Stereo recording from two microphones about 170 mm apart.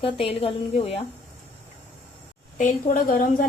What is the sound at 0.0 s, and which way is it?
Speech, 35° left (ahead or behind).